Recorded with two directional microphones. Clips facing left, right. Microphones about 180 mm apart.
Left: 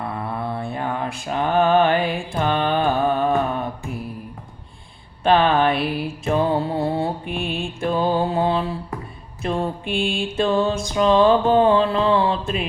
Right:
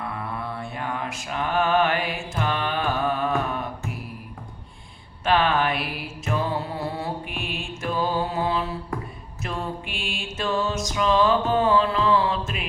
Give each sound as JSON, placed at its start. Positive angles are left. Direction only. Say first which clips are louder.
{"t": 0.0, "sound": "mantra", "louder": "left 4 dB", "side_deg": 30}
{"t": 5.2, "sound": "music", "louder": "left 5 dB", "side_deg": 30}